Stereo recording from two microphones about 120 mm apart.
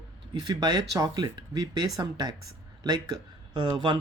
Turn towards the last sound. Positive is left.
turn(degrees=-40)  # may be behind; listen again after turning